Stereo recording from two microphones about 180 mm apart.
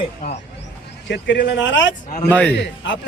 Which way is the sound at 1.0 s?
75° left (ahead or behind).